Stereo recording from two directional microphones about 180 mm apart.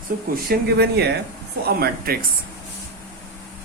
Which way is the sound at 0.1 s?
50° right (ahead or behind).